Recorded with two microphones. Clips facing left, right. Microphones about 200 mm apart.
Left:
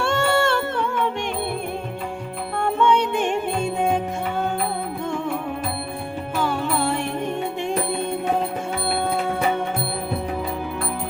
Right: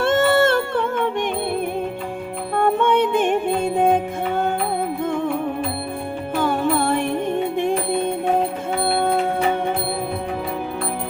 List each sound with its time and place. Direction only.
0.0 s music: 50° right (ahead or behind)
2.6 s music: 50° right (ahead or behind)
6.4 s music: 55° right (ahead or behind)